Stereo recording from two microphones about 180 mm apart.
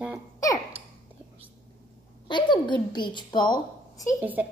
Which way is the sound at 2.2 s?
25° left (ahead or behind).